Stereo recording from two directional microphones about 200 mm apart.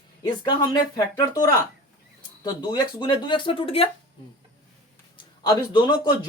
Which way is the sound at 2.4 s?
20° left (ahead or behind).